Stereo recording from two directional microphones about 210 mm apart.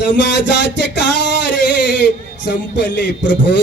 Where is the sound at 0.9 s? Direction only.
55° left (ahead or behind).